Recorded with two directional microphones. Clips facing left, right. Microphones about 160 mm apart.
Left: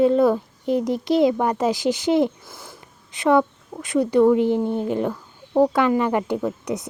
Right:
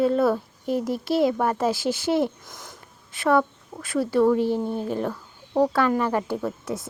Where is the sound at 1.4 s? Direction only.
15° left (ahead or behind).